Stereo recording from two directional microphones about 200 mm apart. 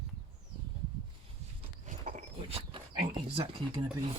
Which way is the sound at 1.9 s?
40° right (ahead or behind).